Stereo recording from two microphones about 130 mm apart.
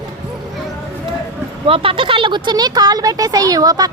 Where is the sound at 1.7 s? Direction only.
45° right (ahead or behind).